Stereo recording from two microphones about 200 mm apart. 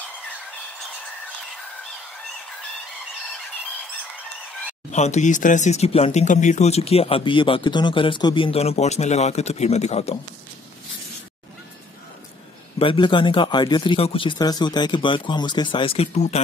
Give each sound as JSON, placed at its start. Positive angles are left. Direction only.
{"t": 4.9, "sound": "speech", "side_deg": 35}
{"t": 12.7, "sound": "speech", "side_deg": 25}